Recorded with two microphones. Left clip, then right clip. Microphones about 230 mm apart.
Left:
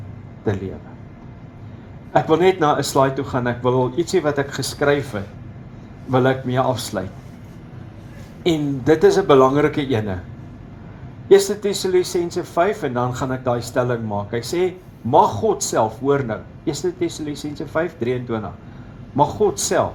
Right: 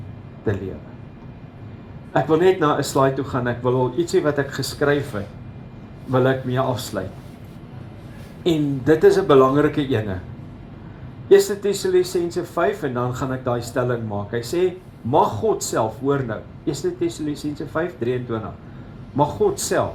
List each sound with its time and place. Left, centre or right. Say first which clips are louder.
2.1 s speech: left 1 dB; left
8.4 s speech: left 1 dB; left
11.3 s speech: left 1 dB; left